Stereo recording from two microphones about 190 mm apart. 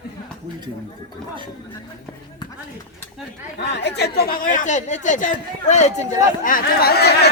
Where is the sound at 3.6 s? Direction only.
65° left (ahead or behind).